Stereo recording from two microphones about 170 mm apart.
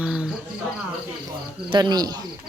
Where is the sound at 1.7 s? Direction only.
25° right (ahead or behind).